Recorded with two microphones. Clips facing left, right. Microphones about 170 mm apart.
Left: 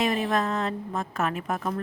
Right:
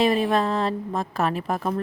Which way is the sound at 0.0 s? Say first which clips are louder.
Right 5 dB; 30° right (ahead or behind).